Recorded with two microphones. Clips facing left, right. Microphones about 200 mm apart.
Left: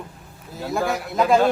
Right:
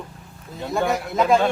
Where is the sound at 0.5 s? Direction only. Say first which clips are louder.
Right 1 dB; centre (ahead or behind).